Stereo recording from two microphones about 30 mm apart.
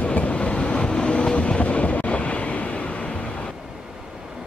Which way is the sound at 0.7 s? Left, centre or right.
Left.